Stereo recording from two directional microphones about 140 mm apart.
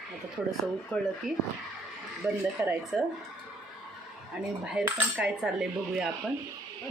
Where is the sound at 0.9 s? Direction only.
10° left (ahead or behind).